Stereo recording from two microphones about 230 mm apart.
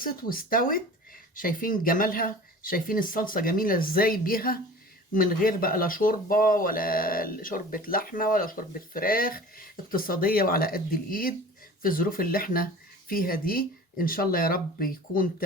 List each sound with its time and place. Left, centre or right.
0.0 s speech: left